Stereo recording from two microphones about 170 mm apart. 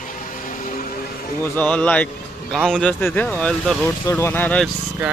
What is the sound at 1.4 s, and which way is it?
Speech, 10° left (ahead or behind).